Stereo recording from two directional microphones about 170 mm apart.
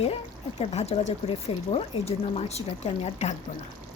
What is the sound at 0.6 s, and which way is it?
Speech, 40° left (ahead or behind).